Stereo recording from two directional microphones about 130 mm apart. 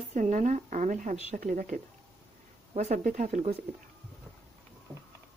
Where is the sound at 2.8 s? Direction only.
70° right (ahead or behind).